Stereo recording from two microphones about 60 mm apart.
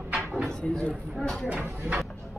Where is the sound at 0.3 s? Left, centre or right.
Centre.